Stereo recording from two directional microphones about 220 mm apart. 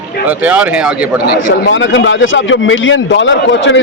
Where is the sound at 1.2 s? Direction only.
50° left (ahead or behind).